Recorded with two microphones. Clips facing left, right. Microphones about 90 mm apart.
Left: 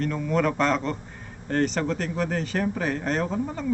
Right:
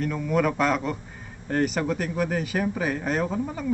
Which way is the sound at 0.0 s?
5° right (ahead or behind).